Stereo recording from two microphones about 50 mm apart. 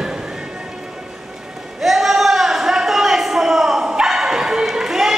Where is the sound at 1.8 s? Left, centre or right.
Centre.